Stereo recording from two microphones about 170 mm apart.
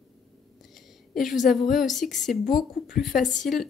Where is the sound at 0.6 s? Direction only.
Centre (ahead or behind).